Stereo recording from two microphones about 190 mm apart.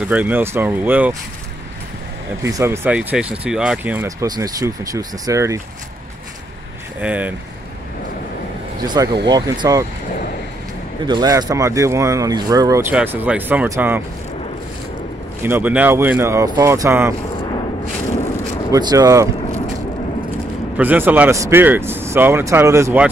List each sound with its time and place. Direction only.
0.0 s speech: 5° right (ahead or behind)
2.4 s speech: 15° right (ahead or behind)
7.0 s speech: 5° right (ahead or behind)
8.8 s speech: 20° right (ahead or behind)
11.1 s speech: 20° right (ahead or behind)
15.4 s speech: 10° right (ahead or behind)
18.7 s speech: 20° right (ahead or behind)
20.7 s speech: 10° right (ahead or behind)